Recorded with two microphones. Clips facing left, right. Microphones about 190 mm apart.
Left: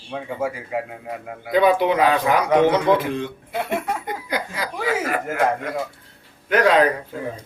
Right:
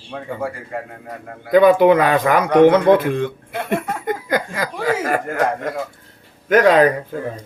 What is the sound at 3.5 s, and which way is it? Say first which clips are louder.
Speech: right 2 dB; 5° left (ahead or behind).